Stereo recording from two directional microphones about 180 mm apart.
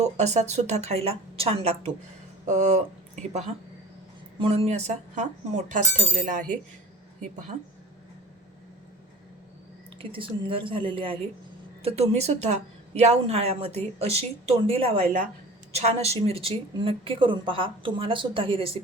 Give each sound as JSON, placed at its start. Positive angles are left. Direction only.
{"t": 0.0, "sound": "a woman's voice", "side_deg": -40}
{"t": 4.4, "sound": "a woman's voice", "side_deg": -35}
{"t": 10.0, "sound": "a woman's voice", "side_deg": -30}